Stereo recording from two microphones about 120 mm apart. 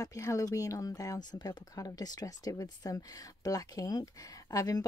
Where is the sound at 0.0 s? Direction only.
25° left (ahead or behind).